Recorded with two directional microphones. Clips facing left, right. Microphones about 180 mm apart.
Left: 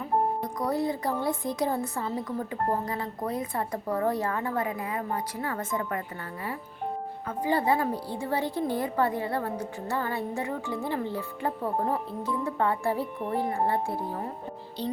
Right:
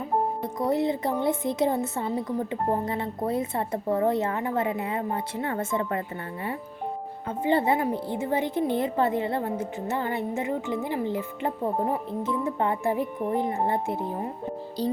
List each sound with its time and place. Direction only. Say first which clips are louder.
0.4 s a woman's voice: right 3 dB; 25° right (ahead or behind)
7.3 s a woman's voice: right 2 dB; 25° right (ahead or behind)